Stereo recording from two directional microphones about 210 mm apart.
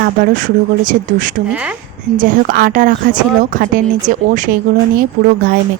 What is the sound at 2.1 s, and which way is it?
A woman's voice, 40° right (ahead or behind).